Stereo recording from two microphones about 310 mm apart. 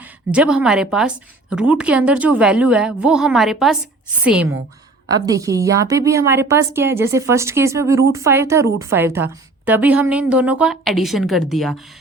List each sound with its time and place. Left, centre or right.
0.3 s a woman's voice: centre